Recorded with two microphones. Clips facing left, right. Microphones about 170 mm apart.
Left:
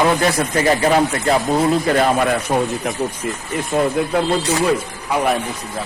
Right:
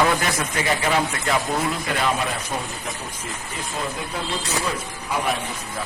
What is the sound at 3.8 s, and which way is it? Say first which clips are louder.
Speech: left 12 dB; 55° left (ahead or behind).